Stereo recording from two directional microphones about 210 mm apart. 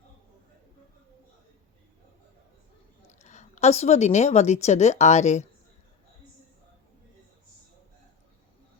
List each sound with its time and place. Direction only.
3.1 s a woman's voice: 35° left (ahead or behind)